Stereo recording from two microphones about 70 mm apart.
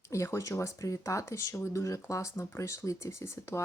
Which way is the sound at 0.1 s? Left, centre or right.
Left.